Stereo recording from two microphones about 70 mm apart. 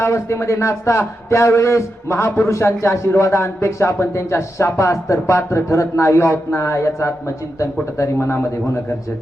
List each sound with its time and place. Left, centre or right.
0.0 s a man's voice: left